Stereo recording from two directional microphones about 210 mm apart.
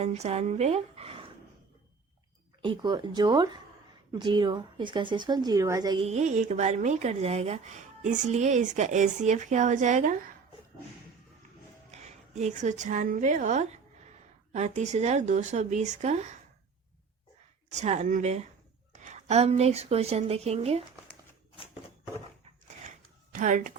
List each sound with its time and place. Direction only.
0.0 s a woman's voice: 30° right (ahead or behind)
2.6 s speech: 20° right (ahead or behind)
6.1 s speech: 35° right (ahead or behind)
11.9 s speech: 30° right (ahead or behind)
17.7 s speech: 30° right (ahead or behind)
22.8 s a sound: 35° right (ahead or behind)